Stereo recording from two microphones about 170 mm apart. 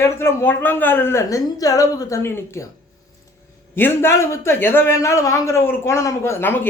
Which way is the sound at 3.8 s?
15° left (ahead or behind).